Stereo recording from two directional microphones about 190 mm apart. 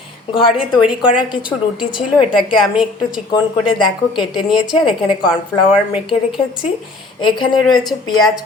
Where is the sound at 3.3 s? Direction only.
25° left (ahead or behind).